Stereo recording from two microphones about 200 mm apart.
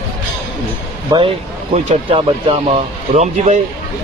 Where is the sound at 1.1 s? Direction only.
25° right (ahead or behind).